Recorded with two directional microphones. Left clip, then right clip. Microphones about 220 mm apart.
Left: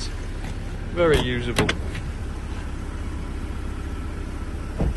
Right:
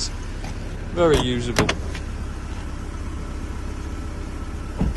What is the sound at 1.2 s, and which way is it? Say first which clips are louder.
Speech: right 1 dB; 25° right (ahead or behind).